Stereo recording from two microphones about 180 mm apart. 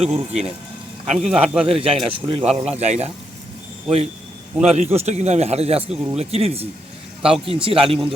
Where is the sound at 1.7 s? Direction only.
30° right (ahead or behind).